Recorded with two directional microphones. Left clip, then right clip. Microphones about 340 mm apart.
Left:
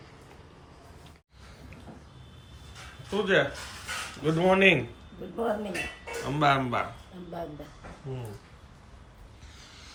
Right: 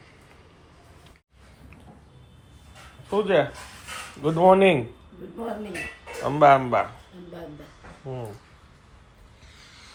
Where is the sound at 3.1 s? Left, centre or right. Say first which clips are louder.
Right 3 dB; centre.